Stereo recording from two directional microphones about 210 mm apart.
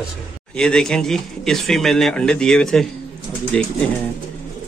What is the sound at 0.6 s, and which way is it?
Speech, 5° left (ahead or behind).